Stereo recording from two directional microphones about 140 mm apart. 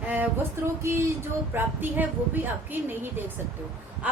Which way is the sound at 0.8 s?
20° right (ahead or behind).